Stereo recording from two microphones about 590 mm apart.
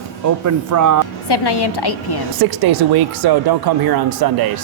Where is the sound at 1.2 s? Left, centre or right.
Left.